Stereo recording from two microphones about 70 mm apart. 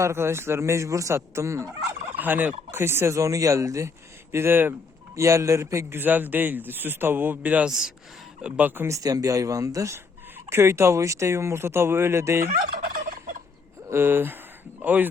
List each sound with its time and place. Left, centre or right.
0.0 s speech: right
2.1 s fowl: right
2.8 s speech: right
3.2 s speech: right
5.1 s speech: right
6.0 s a man's voice: right
8.6 s speech: right
8.9 s speech: right
13.8 s speech: right